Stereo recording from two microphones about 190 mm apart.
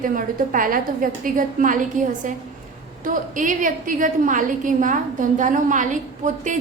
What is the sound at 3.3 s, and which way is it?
A woman's voice, 45° right (ahead or behind).